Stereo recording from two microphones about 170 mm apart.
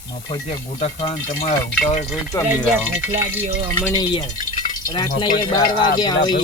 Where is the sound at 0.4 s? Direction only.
35° left (ahead or behind).